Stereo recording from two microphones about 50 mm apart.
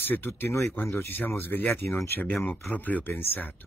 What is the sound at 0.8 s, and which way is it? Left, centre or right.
Speech, left.